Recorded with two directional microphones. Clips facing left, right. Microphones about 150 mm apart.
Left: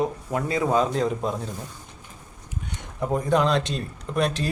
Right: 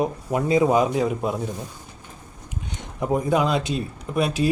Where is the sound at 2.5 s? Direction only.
20° right (ahead or behind).